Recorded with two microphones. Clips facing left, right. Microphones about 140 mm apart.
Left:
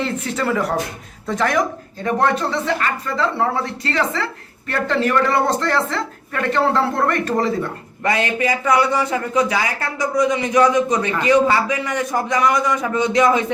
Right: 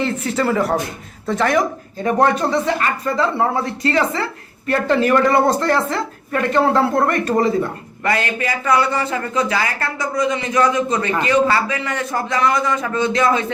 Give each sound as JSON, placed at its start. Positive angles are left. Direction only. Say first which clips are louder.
{"t": 0.0, "sound": "speech", "louder": "right 3 dB", "side_deg": 0}
{"t": 2.0, "sound": "speech", "louder": "right 2 dB", "side_deg": -15}
{"t": 8.0, "sound": "a man's voice", "louder": "left 1 dB", "side_deg": 20}